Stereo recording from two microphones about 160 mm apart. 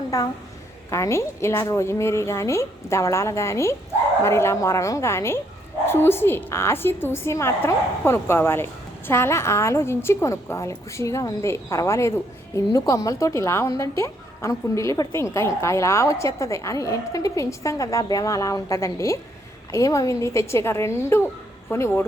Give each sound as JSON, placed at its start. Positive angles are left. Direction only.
{"t": 0.1, "sound": "a woman's voice", "side_deg": 20}